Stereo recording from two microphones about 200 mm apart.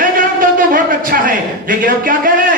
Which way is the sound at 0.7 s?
45° right (ahead or behind).